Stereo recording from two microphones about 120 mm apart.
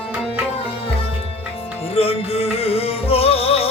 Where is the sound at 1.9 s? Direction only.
55° left (ahead or behind).